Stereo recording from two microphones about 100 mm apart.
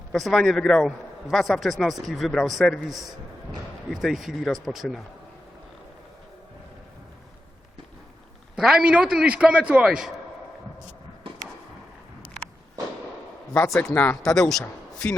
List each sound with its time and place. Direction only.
0.1 s a man's voice: 5° left (ahead or behind)
8.5 s a man's voice: 5° right (ahead or behind)
13.7 s a man's voice: 5° left (ahead or behind)
13.9 s speech: 15° left (ahead or behind)
14.2 s a man's voice: 5° left (ahead or behind)